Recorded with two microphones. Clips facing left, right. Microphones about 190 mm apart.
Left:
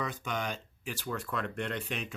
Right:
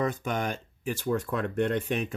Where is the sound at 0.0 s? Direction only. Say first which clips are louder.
Right 6 dB; 50° right (ahead or behind).